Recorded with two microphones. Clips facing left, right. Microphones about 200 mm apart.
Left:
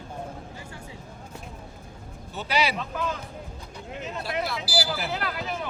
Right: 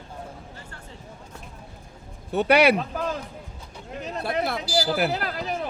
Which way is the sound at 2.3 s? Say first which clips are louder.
Right 9 dB; 60° right (ahead or behind).